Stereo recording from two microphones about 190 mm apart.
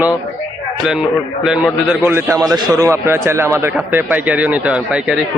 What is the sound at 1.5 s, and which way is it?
A man's voice, 5° right (ahead or behind).